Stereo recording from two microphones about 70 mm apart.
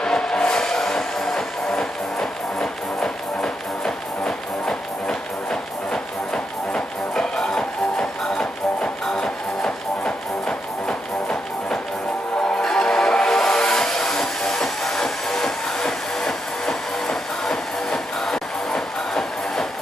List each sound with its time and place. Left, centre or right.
0.0 s music: centre
12.5 s vehicle: centre